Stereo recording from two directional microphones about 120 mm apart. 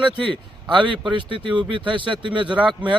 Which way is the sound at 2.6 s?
10° right (ahead or behind).